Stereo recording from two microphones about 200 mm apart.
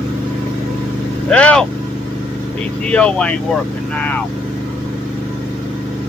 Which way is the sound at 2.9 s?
5° left (ahead or behind).